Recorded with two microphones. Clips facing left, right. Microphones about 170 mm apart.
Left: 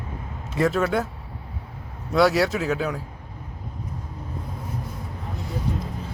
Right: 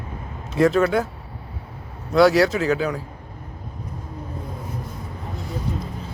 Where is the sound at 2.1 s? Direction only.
Centre (ahead or behind).